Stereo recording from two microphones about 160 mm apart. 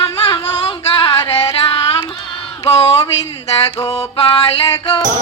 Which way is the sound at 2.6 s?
35° left (ahead or behind).